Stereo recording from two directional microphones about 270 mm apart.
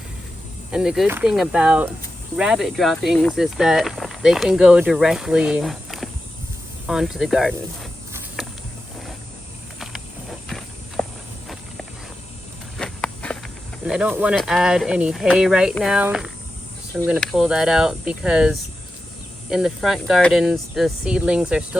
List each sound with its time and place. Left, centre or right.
0.7 s speech: centre
9.8 s walk: centre
12.7 s walk: centre
13.8 s speech: centre